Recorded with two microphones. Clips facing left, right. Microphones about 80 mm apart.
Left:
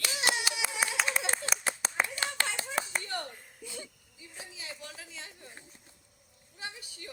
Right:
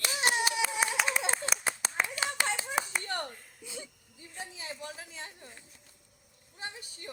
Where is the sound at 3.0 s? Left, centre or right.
Right.